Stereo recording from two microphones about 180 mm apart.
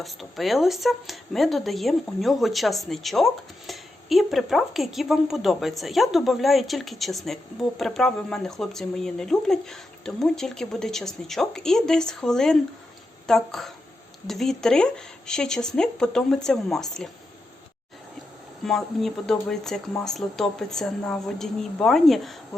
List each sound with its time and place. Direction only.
0.0 s speech: centre (ahead or behind)
18.6 s speech: centre (ahead or behind)